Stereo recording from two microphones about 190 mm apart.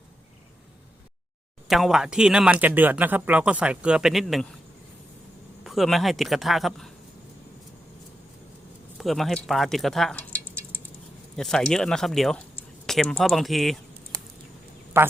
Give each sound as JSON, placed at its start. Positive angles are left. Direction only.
{"t": 1.6, "sound": "speech", "side_deg": 0}
{"t": 5.6, "sound": "speech", "side_deg": 0}
{"t": 9.0, "sound": "speech", "side_deg": 0}
{"t": 14.1, "sound": "a sound", "side_deg": -45}
{"t": 15.0, "sound": "speech", "side_deg": -15}